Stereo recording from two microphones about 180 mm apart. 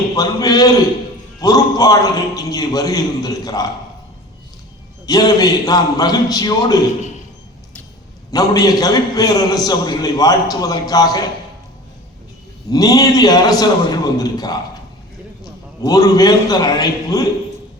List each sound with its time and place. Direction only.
0.2 s a man's voice: 20° left (ahead or behind)
5.0 s a man's voice: 20° left (ahead or behind)
8.3 s a man's voice: 20° left (ahead or behind)
12.7 s a man's voice: 20° left (ahead or behind)
15.8 s a man's voice: 20° left (ahead or behind)